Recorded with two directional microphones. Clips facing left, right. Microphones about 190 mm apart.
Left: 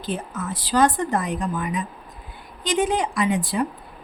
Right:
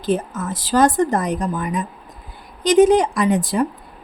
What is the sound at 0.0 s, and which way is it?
Speech, 45° right (ahead or behind).